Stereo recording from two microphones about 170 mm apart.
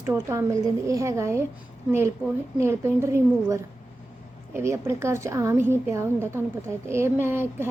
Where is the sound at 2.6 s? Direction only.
15° right (ahead or behind).